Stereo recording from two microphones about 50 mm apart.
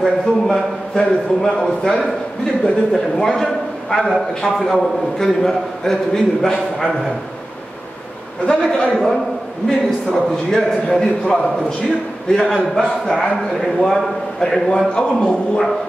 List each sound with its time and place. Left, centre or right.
0.0 s a man's voice: centre
8.5 s a man's voice: centre
9.8 s a man's voice: centre